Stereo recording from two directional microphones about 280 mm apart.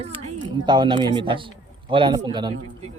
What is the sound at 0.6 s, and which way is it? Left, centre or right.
Speech, centre.